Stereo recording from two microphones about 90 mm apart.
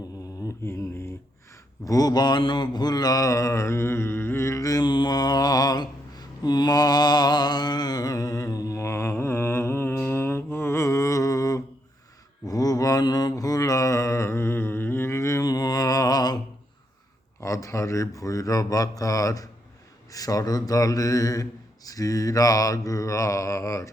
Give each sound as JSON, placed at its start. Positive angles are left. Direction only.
{"t": 0.4, "sound": "mantra", "side_deg": 30}
{"t": 1.8, "sound": "mantra", "side_deg": 40}
{"t": 17.4, "sound": "speech", "side_deg": 35}